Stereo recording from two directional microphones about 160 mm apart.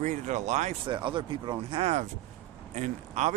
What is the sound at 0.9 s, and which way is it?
Speech, 30° right (ahead or behind).